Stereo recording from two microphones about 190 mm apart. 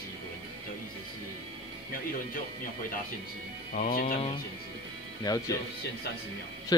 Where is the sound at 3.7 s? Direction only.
50° left (ahead or behind).